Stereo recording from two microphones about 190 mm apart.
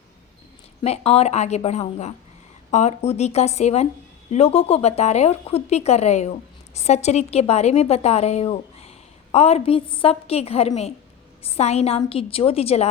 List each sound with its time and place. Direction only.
0.8 s a woman's voice: 30° left (ahead or behind)